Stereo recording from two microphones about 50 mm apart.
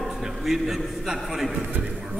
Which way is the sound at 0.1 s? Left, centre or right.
Centre.